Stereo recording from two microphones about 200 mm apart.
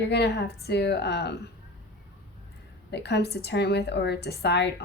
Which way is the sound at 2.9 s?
55° left (ahead or behind).